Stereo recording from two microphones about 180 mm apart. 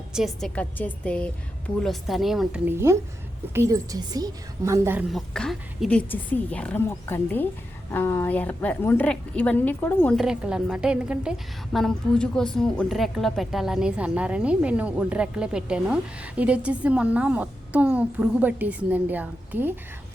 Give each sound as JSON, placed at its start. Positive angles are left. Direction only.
{"t": 0.1, "sound": "a woman's voice", "side_deg": 0}
{"t": 5.1, "sound": "a woman's voice", "side_deg": 0}
{"t": 10.2, "sound": "a woman's voice", "side_deg": -5}